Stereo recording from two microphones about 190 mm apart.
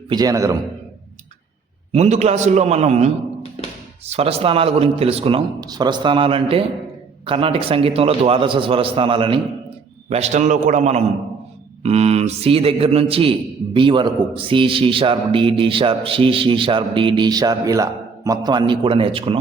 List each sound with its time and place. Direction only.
0.1 s a man's voice: 20° right (ahead or behind)
1.9 s a man's voice: 35° right (ahead or behind)
5.5 s a man's voice: 20° right (ahead or behind)